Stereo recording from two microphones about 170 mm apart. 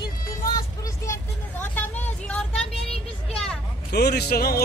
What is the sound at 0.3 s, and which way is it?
Vehicle, 20° left (ahead or behind).